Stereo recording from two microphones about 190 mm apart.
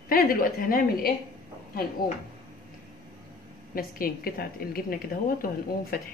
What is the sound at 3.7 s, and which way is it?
A woman's voice, 50° left (ahead or behind).